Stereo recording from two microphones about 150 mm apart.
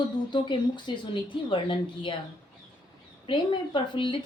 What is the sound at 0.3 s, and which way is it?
Speech, 30° left (ahead or behind).